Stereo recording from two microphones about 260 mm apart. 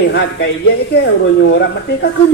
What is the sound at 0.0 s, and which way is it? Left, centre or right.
Speech, left.